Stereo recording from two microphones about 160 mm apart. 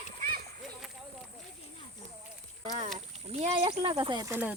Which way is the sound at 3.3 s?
45° right (ahead or behind).